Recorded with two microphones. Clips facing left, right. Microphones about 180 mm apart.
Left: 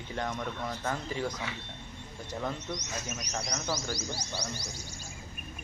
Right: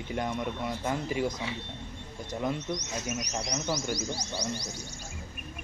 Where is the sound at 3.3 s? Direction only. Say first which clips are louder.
Even; 15° right (ahead or behind).